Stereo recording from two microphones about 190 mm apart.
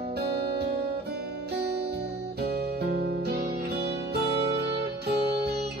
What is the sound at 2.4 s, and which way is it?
Music, 55° right (ahead or behind).